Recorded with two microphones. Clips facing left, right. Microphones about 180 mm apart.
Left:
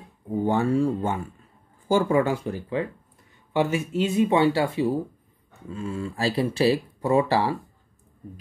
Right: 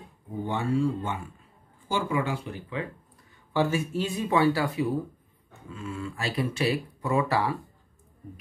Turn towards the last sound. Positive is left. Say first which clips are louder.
# left 4 dB
turn(degrees=30)  # may be behind; listen again after turning